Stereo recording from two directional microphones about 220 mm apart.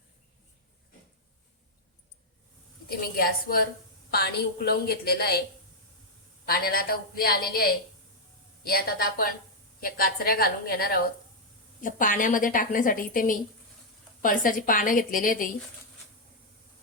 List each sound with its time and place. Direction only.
2.9 s a woman's voice: 40° left (ahead or behind)
6.4 s a woman's voice: 45° left (ahead or behind)